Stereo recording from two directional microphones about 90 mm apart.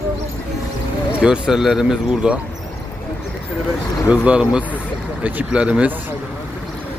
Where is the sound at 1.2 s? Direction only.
5° right (ahead or behind).